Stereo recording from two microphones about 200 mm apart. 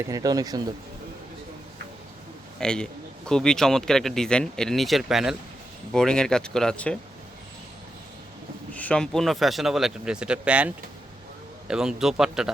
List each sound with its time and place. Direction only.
0.0 s speech: 15° right (ahead or behind)
2.6 s a man's voice: 5° left (ahead or behind)
8.7 s a man's voice: 5° left (ahead or behind)
11.7 s a man's voice: 5° right (ahead or behind)